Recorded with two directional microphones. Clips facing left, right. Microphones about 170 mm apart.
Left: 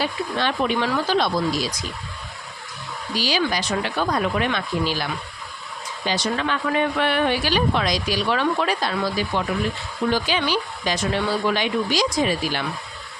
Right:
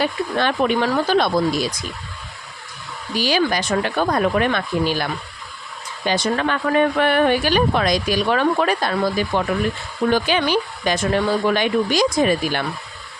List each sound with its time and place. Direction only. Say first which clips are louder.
0.0 s speech: right 4 dB; 50° right (ahead or behind)
3.2 s speech: right 4 dB; 55° right (ahead or behind)
6.1 s speech: right 4 dB; 50° right (ahead or behind)